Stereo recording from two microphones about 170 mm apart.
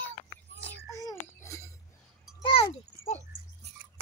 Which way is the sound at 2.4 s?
30° left (ahead or behind).